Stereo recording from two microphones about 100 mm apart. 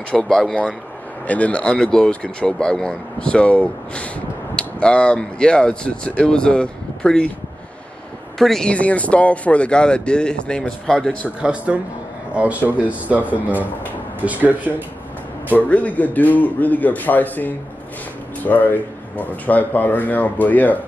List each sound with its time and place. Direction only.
0.1 s speech: 5° left (ahead or behind)
8.4 s speech: 5° left (ahead or behind)
11.4 s speech: 15° right (ahead or behind)
15.5 s speech: 15° left (ahead or behind)